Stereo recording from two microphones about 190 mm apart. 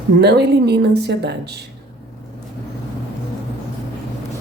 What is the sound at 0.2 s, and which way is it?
Speech, 60° right (ahead or behind).